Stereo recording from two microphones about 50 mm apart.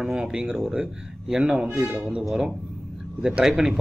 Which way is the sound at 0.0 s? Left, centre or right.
Centre.